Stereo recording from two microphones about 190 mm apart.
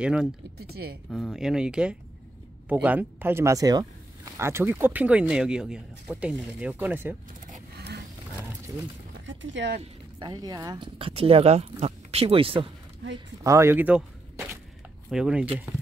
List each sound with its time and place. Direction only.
0.0 s speech: 5° right (ahead or behind)
0.6 s speech: 55° right (ahead or behind)
1.1 s speech: centre (ahead or behind)
7.7 s a sound: 60° right (ahead or behind)
9.2 s speech: 80° right
10.1 s speech: 20° right (ahead or behind)
13.4 s speech: 15° right (ahead or behind)
15.0 s speech: 5° right (ahead or behind)